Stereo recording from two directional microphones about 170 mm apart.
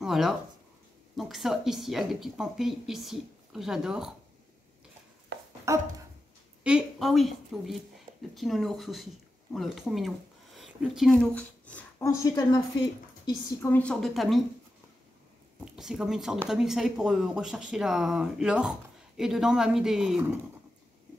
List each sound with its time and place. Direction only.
0.0 s speech: centre (ahead or behind)
5.7 s dog: 15° right (ahead or behind)
6.6 s a woman's voice: 5° right (ahead or behind)
12.2 s a woman's voice: 20° left (ahead or behind)
13.6 s speech: 10° left (ahead or behind)
15.6 s speech: 5° right (ahead or behind)